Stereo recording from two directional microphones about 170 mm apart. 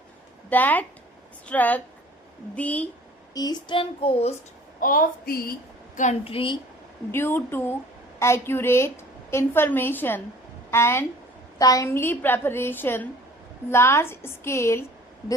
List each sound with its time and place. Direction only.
0.5 s a woman's voice: 10° left (ahead or behind)
3.3 s child singing: 25° left (ahead or behind)
4.8 s a woman's voice: 55° left (ahead or behind)
6.0 s child singing: 40° left (ahead or behind)
7.1 s a woman's voice: 15° left (ahead or behind)